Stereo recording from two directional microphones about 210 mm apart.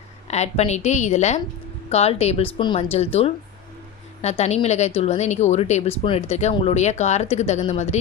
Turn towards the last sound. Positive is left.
turn(degrees=30)  # may be behind; listen again after turning